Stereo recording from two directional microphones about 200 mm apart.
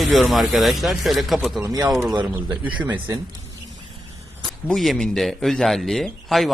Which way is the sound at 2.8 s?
20° right (ahead or behind).